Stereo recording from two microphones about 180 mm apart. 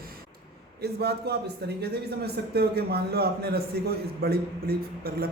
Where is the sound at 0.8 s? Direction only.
65° right (ahead or behind).